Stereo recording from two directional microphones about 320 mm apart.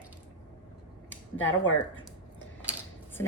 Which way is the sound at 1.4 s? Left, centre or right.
Left.